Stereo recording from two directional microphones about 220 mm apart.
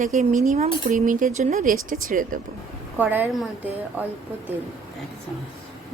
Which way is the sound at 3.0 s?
10° right (ahead or behind).